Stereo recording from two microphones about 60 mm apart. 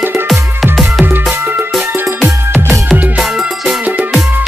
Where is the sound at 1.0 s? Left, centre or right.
Right.